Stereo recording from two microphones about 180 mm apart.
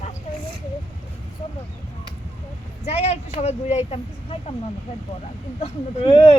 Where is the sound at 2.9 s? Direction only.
35° left (ahead or behind).